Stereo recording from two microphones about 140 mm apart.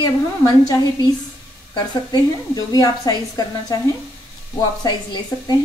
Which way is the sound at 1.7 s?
30° left (ahead or behind).